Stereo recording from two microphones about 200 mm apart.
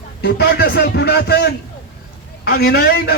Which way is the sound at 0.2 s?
50° left (ahead or behind).